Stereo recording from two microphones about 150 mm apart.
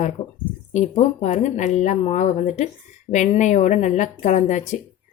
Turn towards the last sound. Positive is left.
turn(degrees=50)  # may be behind; listen again after turning